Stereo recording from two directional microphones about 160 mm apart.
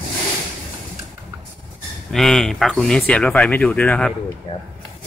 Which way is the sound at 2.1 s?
Centre (ahead or behind).